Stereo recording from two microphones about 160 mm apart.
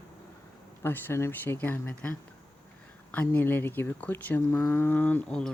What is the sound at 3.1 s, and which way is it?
Speech, 10° left (ahead or behind).